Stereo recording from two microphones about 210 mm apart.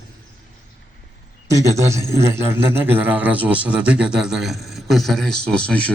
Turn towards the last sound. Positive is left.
turn(degrees=5)  # may be behind; listen again after turning